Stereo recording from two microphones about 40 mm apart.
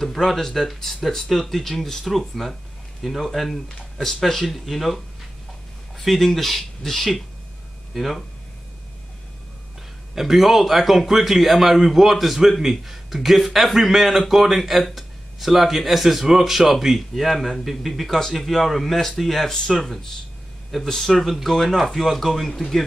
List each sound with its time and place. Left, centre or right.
0.0 s a sound: centre
0.4 s a man's voice: centre
10.1 s a man's voice: centre
19.5 s a man's voice: centre